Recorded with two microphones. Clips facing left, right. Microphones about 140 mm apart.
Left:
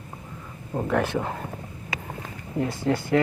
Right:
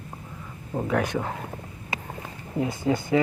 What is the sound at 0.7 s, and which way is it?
Speech, centre (ahead or behind).